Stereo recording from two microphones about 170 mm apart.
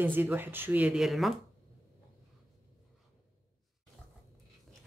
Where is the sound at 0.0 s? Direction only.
10° right (ahead or behind).